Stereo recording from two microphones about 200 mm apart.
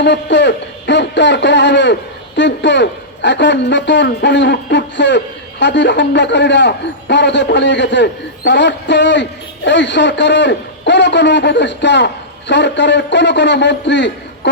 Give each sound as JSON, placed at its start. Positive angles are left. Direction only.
{"t": 0.0, "sound": "speech", "side_deg": 60}